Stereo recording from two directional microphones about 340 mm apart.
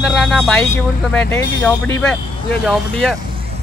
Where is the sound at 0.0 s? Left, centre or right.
Centre.